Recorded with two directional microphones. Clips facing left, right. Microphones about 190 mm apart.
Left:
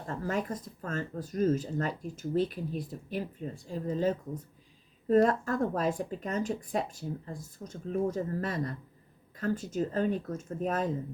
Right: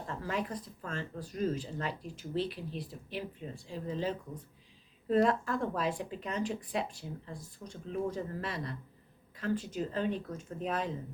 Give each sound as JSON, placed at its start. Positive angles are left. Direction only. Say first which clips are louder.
{"t": 0.1, "sound": "speech", "louder": "left 4 dB", "side_deg": 45}